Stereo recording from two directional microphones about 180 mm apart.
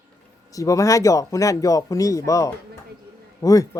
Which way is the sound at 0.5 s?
20° left (ahead or behind).